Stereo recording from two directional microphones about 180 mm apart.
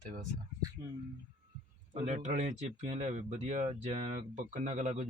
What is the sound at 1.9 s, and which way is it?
Speech, 40° right (ahead or behind).